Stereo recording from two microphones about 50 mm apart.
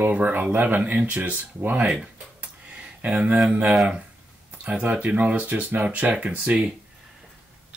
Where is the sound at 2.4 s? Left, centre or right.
Right.